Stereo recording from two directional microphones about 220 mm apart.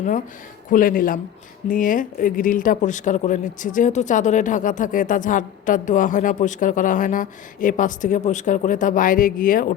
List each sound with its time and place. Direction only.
0.7 s speech: 40° left (ahead or behind)